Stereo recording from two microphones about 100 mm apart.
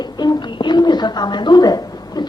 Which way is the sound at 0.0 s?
45° left (ahead or behind).